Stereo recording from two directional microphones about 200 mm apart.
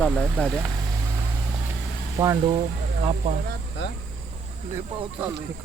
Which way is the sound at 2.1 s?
15° right (ahead or behind).